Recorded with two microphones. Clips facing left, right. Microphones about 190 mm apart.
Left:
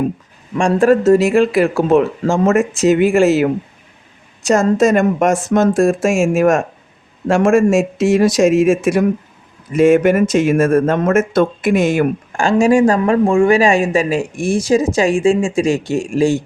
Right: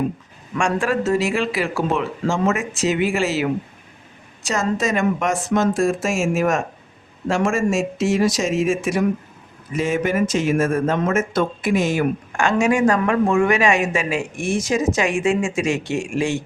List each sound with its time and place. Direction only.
0.5 s speech: 30° left (ahead or behind); by 12.0 s 60° left (ahead or behind)
12.3 s speech: 30° left (ahead or behind)